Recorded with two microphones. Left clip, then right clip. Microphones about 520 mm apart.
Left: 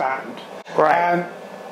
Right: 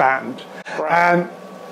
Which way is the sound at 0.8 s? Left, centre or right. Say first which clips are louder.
Left 7 dB; left.